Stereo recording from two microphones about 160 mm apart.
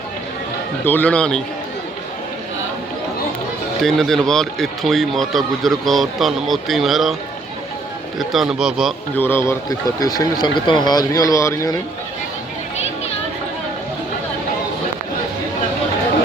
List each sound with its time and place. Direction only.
0.9 s a man's voice: 10° left (ahead or behind)
3.8 s speech: centre (ahead or behind)
8.2 s speech: centre (ahead or behind)
9.1 s speech: 15° left (ahead or behind)